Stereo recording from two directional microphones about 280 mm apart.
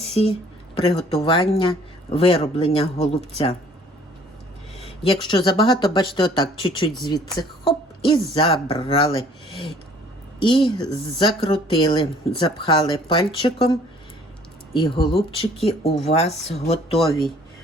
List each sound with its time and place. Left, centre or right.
0.1 s speech: left
4.8 s speech: centre
14.7 s speech: centre